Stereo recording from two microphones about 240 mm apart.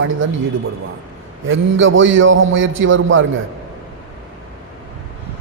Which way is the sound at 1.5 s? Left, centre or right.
Right.